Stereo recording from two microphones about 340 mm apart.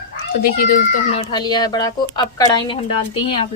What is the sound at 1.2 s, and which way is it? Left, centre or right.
Speech, centre.